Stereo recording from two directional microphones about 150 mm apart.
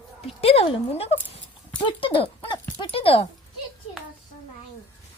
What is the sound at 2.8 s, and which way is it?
Dog, 35° left (ahead or behind).